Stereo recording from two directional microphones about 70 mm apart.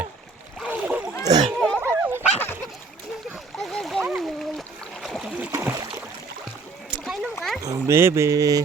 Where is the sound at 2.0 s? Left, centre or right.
Right.